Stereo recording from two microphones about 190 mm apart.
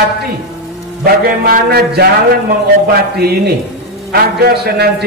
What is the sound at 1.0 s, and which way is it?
A man's voice, 55° right (ahead or behind).